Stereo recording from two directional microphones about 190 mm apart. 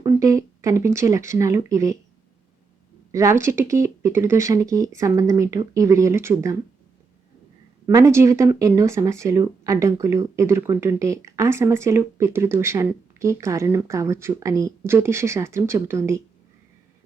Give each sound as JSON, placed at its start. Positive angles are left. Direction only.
{"t": 0.0, "sound": "speech", "side_deg": -15}
{"t": 3.1, "sound": "speech", "side_deg": -15}
{"t": 7.9, "sound": "speech", "side_deg": -15}